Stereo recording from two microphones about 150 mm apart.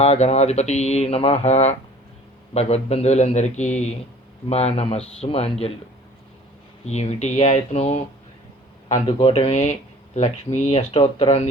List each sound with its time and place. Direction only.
0.0 s speech: 45° left (ahead or behind)
6.8 s speech: 45° left (ahead or behind)
9.0 s speech: 35° left (ahead or behind)